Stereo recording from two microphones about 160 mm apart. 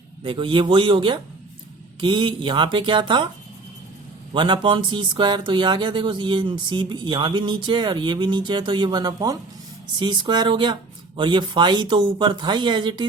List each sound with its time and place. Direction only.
0.2 s speech: 30° right (ahead or behind)
4.4 s speech: 30° right (ahead or behind)